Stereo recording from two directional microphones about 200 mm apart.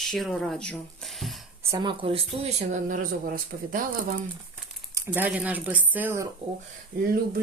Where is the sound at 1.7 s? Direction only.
20° right (ahead or behind); by 3.8 s 45° right (ahead or behind).